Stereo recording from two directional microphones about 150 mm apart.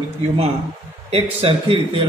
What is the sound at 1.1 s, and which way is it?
Speech, 40° right (ahead or behind).